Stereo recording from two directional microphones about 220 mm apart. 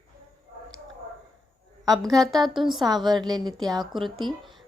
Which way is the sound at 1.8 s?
15° right (ahead or behind).